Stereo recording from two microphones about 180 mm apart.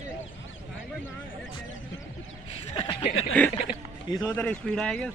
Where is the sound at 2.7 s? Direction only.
30° left (ahead or behind).